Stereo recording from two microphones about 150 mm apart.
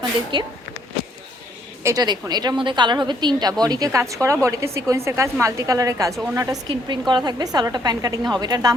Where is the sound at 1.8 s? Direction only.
25° right (ahead or behind).